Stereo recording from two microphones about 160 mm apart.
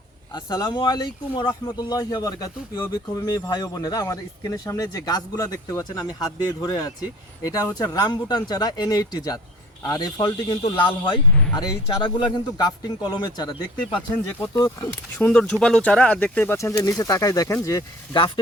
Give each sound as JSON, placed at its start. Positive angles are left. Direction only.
{"t": 0.3, "sound": "speech", "side_deg": 25}
{"t": 15.2, "sound": "speech", "side_deg": 5}